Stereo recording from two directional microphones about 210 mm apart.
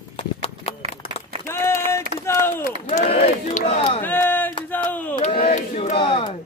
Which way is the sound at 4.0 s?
10° left (ahead or behind).